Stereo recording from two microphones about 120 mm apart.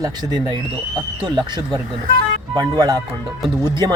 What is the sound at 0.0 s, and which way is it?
Speech, 35° right (ahead or behind).